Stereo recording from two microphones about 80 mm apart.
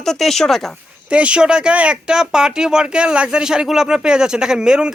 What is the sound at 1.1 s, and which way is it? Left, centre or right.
A man's voice, centre.